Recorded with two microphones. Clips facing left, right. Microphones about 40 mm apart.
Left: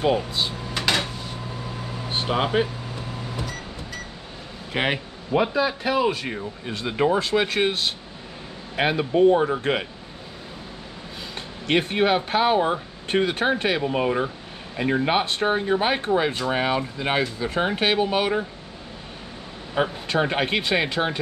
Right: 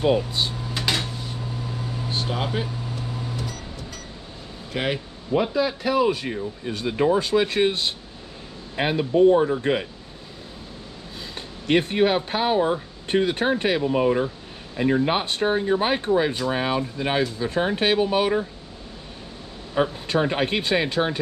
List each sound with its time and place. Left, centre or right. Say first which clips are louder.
0.4 s drawer open or close: even; centre
1.6 s vehicle: right 1 dB; centre
2.0 s speech: left 4 dB; left
2.9 s microwave oven: right 1 dB; centre
4.7 s speech: left 2 dB; left; by 7.7 s centre
8.7 s speech: even; left
11.7 s speech: right 1 dB; centre; by 15.0 s left
15.0 s speech: left 1 dB; centre
20.2 s speech: even; left